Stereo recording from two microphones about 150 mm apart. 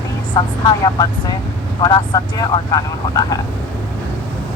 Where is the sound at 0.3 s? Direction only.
30° left (ahead or behind).